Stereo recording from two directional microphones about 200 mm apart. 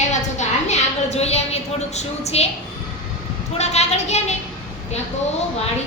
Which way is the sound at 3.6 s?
35° left (ahead or behind).